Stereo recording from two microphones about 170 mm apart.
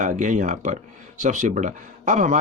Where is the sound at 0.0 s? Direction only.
50° right (ahead or behind).